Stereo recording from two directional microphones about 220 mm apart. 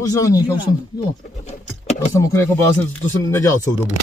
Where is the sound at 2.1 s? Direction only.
10° left (ahead or behind).